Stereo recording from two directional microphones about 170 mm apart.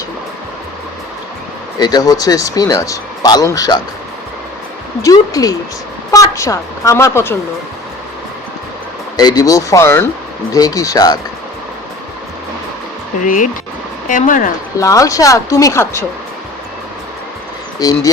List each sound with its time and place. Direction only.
1.8 s speech: 25° left (ahead or behind)
5.0 s a woman's voice: 20° left (ahead or behind)
9.1 s speech: 25° left (ahead or behind)
13.2 s speech: 50° left (ahead or behind)
14.8 s speech: 20° left (ahead or behind)
17.8 s speech: 20° left (ahead or behind)